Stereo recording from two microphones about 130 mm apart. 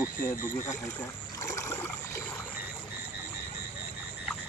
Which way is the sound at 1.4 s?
25° left (ahead or behind).